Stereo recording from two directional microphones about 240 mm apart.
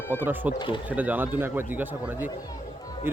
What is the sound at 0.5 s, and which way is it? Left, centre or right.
Speech, centre.